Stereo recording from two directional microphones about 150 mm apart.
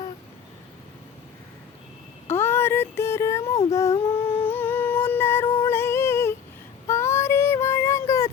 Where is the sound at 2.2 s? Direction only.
15° left (ahead or behind).